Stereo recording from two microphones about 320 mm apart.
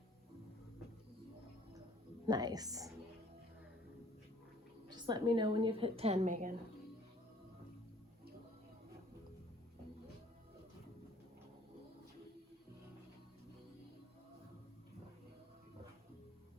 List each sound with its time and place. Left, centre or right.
2.2 s a woman's voice: centre
4.9 s a woman's voice: centre